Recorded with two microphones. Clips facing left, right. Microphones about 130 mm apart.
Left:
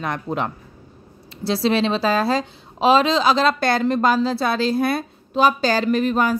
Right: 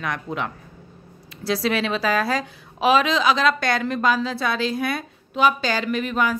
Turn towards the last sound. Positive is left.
turn(degrees=35)  # may be behind; listen again after turning